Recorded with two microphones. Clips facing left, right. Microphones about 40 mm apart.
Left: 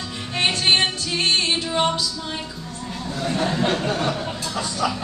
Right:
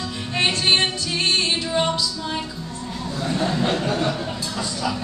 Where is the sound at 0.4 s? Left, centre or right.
Centre.